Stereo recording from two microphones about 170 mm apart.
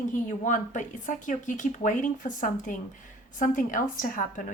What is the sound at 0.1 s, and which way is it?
Speech, 50° left (ahead or behind).